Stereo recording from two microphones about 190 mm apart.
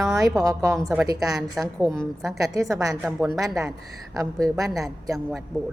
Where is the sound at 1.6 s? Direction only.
Centre (ahead or behind).